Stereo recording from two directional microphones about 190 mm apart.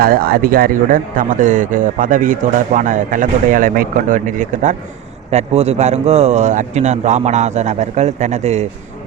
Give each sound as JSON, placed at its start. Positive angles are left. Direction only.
{"t": 0.0, "sound": "speech", "side_deg": -50}